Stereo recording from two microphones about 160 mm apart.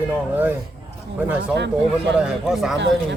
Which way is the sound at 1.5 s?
90° right.